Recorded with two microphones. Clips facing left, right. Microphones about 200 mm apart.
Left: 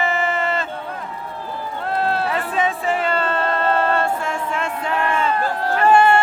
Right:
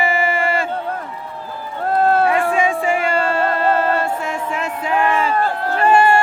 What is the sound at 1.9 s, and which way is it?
Run, 45° right (ahead or behind).